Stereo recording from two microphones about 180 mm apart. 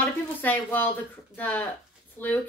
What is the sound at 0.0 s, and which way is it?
A woman's voice, 10° left (ahead or behind).